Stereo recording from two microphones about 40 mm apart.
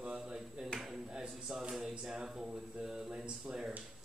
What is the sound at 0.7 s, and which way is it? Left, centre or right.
Speech, left.